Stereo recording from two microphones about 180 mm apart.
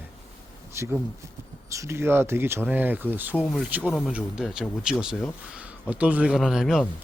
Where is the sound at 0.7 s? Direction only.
15° right (ahead or behind).